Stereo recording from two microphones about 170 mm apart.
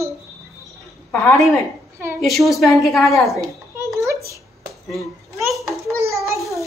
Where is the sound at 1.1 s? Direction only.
15° left (ahead or behind).